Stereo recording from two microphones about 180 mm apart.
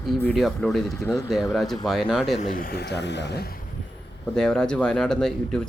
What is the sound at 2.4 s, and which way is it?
Speech, 50° left (ahead or behind).